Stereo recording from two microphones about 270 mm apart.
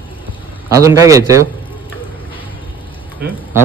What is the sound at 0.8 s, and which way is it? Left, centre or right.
Speech, centre.